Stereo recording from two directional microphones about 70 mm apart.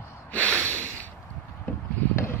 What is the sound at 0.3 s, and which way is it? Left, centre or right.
Snort, left.